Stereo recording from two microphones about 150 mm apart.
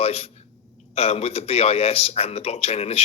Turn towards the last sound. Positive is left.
turn(degrees=45)  # may be behind; listen again after turning